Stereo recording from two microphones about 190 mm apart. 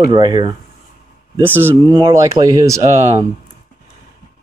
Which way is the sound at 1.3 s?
10° right (ahead or behind).